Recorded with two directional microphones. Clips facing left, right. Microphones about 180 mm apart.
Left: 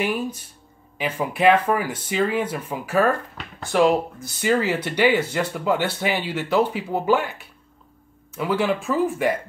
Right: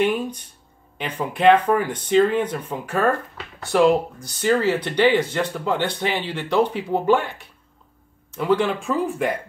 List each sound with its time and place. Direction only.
0.0 s speech: 5° left (ahead or behind)
4.4 s speech: 10° left (ahead or behind)